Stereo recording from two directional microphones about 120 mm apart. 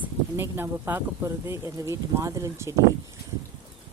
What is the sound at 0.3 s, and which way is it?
Speech, 20° right (ahead or behind).